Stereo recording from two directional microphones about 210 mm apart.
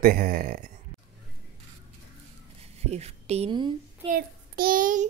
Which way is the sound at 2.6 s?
30° right (ahead or behind).